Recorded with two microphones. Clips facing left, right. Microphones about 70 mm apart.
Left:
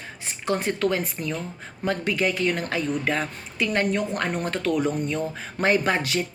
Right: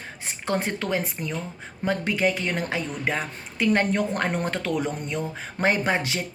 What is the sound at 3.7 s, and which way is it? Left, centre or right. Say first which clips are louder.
A woman's voice: right 2 dB; right.